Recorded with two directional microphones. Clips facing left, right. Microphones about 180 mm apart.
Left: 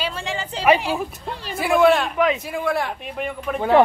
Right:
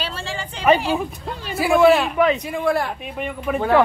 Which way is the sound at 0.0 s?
15° left (ahead or behind).